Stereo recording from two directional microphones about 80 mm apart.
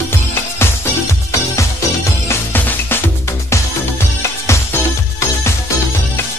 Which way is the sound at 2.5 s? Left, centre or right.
Left.